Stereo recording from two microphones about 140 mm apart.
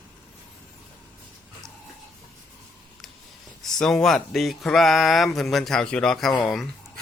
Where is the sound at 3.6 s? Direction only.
5° left (ahead or behind).